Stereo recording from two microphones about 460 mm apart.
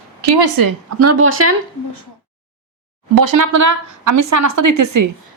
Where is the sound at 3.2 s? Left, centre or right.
Right.